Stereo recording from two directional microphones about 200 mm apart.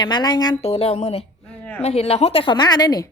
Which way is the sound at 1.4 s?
5° left (ahead or behind).